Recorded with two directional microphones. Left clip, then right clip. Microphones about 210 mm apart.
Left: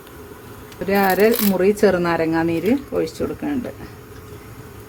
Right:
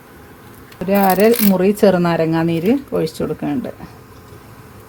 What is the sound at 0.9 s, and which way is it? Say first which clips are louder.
A woman's voice: right 3 dB; 25° right (ahead or behind).